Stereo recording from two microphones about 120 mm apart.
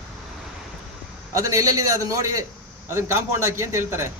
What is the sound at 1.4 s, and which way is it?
A man's voice, 30° right (ahead or behind).